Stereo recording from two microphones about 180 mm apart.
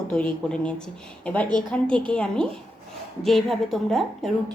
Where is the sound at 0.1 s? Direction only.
5° left (ahead or behind).